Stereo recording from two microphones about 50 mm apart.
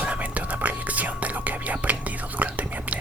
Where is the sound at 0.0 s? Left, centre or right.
Right.